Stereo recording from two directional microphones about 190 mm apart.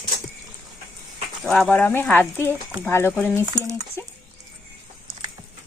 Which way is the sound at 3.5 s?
20° right (ahead or behind).